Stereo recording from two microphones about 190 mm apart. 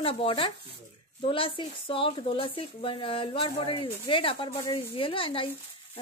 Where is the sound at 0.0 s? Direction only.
30° left (ahead or behind).